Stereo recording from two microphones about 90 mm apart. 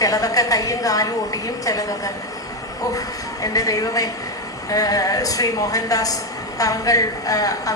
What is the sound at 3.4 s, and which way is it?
A woman's voice, 40° left (ahead or behind).